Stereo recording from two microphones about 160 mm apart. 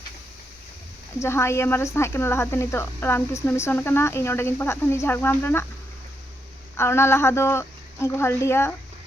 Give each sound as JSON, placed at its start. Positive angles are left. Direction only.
{"t": 1.2, "sound": "speech", "side_deg": 15}
{"t": 6.7, "sound": "speech", "side_deg": 15}